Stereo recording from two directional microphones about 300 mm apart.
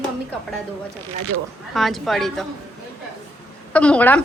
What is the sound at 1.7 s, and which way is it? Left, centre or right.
Speech, centre.